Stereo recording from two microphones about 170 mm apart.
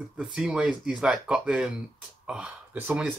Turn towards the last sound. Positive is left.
turn(degrees=-10)  # may be behind; listen again after turning